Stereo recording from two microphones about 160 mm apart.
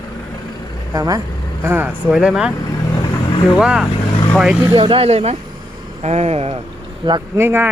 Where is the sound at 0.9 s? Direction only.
25° right (ahead or behind).